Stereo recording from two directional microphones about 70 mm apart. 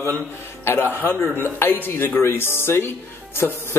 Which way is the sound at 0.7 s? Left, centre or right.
Left.